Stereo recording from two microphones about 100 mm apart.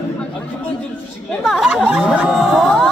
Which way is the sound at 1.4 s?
5° right (ahead or behind).